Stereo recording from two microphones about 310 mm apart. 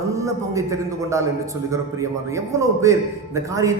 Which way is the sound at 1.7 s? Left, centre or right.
Centre.